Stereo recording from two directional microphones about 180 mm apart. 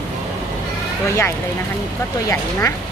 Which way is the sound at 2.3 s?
15° left (ahead or behind).